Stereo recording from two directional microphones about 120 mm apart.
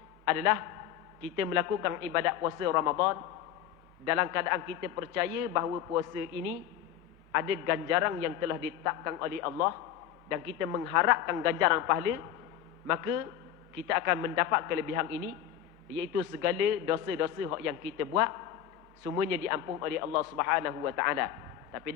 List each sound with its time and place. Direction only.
0.3 s a man's voice: 20° right (ahead or behind)
7.3 s a man's voice: 25° right (ahead or behind)
16.4 s a man's voice: 20° right (ahead or behind)